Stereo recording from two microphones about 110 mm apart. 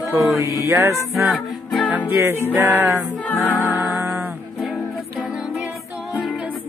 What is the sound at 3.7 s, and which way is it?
Music, 25° right (ahead or behind).